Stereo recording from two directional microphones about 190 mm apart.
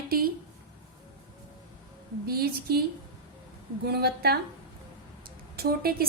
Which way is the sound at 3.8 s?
55° right (ahead or behind).